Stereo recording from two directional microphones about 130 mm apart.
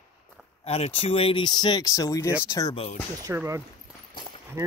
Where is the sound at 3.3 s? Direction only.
20° right (ahead or behind).